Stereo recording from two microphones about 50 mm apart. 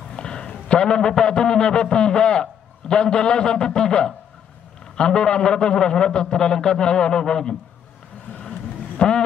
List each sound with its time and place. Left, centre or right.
0.1 s a sound: centre
1.2 s a man's voice: centre
8.3 s vehicle: centre